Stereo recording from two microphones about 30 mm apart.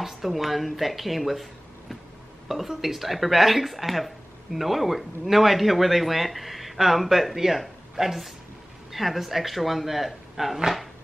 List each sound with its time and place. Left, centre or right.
0.0 s speech: centre
8.9 s speech: centre